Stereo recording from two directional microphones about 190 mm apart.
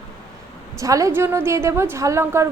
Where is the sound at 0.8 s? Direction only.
15° right (ahead or behind).